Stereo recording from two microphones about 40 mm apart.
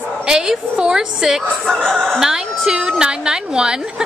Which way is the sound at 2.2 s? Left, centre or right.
Centre.